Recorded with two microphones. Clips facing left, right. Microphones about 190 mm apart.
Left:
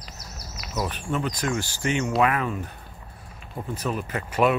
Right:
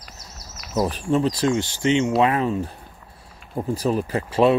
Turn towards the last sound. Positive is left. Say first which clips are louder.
# right 4 dB
turn(degrees=-30)  # may be behind; listen again after turning